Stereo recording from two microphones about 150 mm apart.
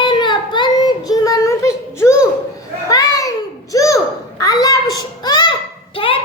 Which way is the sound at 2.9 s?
25° left (ahead or behind).